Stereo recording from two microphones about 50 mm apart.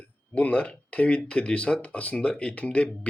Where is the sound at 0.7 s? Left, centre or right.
Left.